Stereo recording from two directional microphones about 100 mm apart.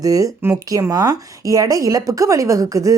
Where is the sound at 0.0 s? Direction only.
35° right (ahead or behind).